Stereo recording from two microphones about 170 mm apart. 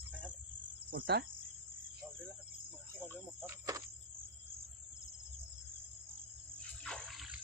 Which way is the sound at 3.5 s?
20° right (ahead or behind).